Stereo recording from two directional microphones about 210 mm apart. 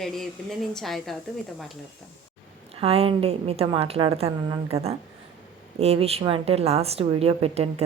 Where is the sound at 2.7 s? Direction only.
25° right (ahead or behind).